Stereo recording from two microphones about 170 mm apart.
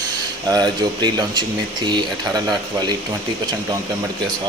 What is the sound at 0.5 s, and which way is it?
Speech, 25° right (ahead or behind).